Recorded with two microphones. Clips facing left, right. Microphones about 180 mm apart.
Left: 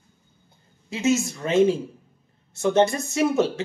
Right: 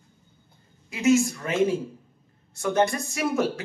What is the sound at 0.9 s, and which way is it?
Speech, 25° left (ahead or behind).